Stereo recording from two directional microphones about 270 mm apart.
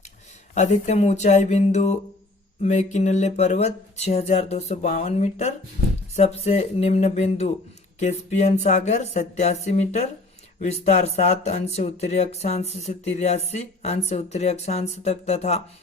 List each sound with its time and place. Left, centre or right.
0.5 s speech: left